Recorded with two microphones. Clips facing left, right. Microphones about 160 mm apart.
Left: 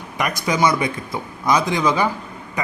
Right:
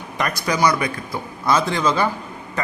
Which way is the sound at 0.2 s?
15° left (ahead or behind).